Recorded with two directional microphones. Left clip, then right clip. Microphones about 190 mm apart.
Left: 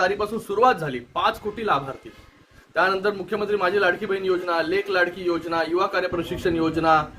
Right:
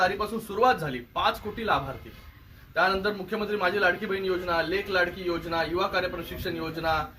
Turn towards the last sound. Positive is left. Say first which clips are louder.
# left 9 dB
turn(degrees=30)  # may be behind; listen again after turning